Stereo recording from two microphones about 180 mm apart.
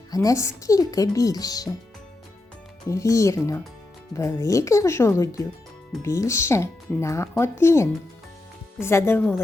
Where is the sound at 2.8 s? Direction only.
15° left (ahead or behind).